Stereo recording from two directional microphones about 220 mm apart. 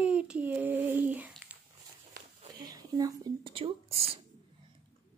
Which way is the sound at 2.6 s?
15° right (ahead or behind).